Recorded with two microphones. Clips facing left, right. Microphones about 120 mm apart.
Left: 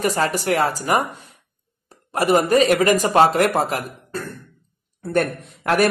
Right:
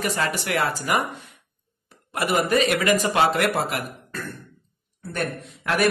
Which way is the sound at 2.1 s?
35° left (ahead or behind).